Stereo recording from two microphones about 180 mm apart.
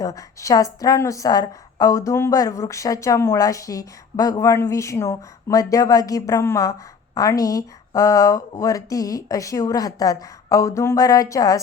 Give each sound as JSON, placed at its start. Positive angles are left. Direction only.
{"t": 0.0, "sound": "a woman's voice", "side_deg": 20}